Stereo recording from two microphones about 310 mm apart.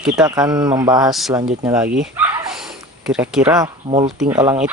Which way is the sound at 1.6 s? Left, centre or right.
Centre.